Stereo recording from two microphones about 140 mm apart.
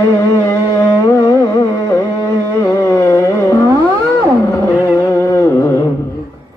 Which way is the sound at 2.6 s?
20° left (ahead or behind).